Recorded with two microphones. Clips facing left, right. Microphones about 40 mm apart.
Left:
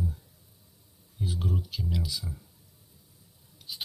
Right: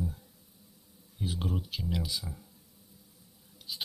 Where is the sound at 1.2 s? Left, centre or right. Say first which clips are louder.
Left 1 dB; right.